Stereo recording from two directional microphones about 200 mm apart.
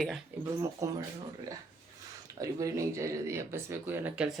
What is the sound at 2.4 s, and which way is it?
Speech, 15° right (ahead or behind).